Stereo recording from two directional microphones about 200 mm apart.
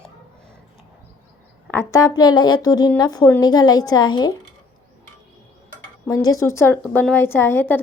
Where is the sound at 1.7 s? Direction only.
15° left (ahead or behind).